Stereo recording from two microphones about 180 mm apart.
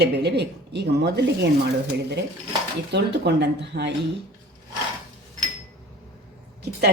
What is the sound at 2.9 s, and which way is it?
A woman's voice, 70° right (ahead or behind).